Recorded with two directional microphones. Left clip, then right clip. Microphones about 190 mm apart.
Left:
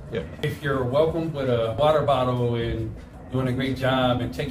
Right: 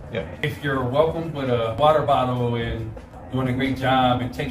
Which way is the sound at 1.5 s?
15° left (ahead or behind).